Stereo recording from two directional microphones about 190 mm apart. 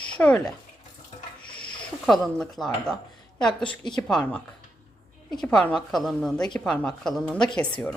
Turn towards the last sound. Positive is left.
turn(degrees=5)  # may be behind; listen again after turning